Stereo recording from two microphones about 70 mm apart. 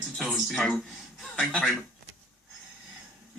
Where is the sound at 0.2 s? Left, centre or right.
Centre.